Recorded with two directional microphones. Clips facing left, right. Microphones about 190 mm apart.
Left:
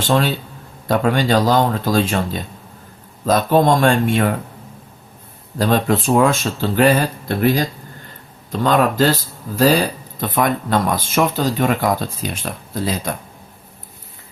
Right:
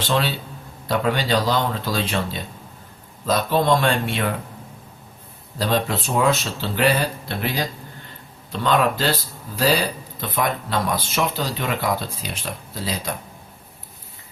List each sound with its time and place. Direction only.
0.0 s speech: 45° left (ahead or behind)
5.5 s speech: 50° left (ahead or behind)
8.6 s speech: 45° left (ahead or behind)